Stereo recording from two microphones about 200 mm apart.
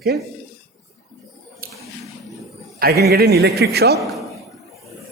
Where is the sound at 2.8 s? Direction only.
50° right (ahead or behind).